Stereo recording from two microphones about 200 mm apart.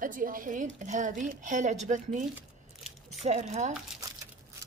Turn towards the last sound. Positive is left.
turn(degrees=-35)  # may be behind; listen again after turning